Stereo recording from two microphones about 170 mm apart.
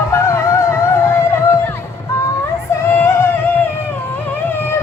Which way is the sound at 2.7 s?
15° left (ahead or behind).